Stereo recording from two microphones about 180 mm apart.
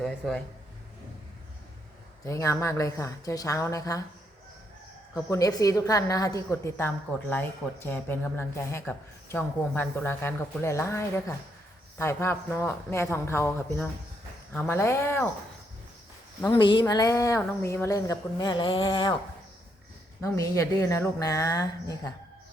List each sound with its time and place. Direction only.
0.0 s speech: centre (ahead or behind)
2.2 s a woman's voice: 15° left (ahead or behind)
5.1 s a woman's voice: 20° left (ahead or behind)
16.6 s speech: 25° left (ahead or behind)
20.2 s a woman's voice: 15° left (ahead or behind)